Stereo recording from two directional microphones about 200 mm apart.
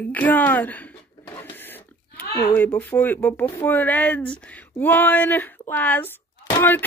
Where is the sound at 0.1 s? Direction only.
10° left (ahead or behind).